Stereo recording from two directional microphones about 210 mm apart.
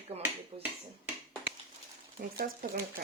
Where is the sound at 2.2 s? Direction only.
45° right (ahead or behind).